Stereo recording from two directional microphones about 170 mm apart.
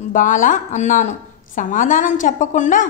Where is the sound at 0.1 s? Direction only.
50° left (ahead or behind).